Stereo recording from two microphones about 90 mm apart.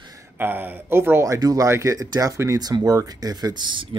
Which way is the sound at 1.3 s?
40° right (ahead or behind).